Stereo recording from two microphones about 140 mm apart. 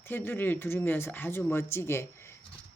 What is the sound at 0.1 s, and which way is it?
Speech, 15° left (ahead or behind).